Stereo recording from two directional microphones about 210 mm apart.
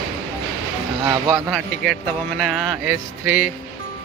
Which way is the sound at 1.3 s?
10° right (ahead or behind).